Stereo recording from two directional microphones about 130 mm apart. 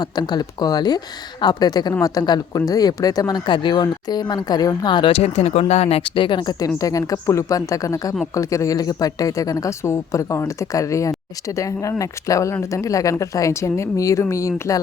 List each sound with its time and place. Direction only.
0.0 s speech: 30° left (ahead or behind); by 6.0 s 55° left (ahead or behind)
6.1 s speech: 40° left (ahead or behind)